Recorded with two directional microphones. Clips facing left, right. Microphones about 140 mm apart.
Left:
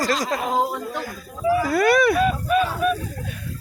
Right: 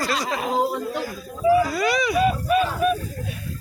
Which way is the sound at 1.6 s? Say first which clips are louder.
Left 5 dB; 55° left (ahead or behind).